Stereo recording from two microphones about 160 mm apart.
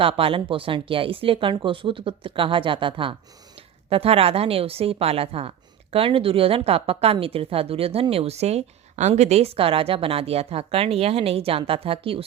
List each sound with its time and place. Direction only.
0.0 s a woman's voice: 35° right (ahead or behind)